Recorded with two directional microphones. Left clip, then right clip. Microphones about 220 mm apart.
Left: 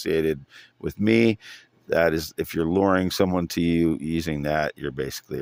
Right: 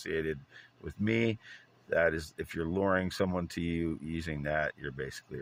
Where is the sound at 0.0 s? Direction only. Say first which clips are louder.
Left 11 dB; 50° left (ahead or behind).